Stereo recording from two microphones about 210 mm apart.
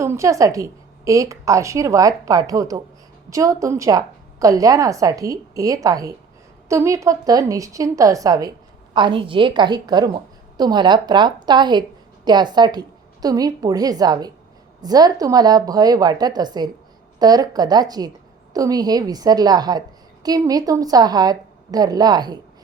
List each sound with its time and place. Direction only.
0.0 s a woman's voice: 15° right (ahead or behind)